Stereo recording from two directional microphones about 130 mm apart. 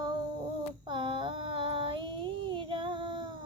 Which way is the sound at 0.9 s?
40° right (ahead or behind).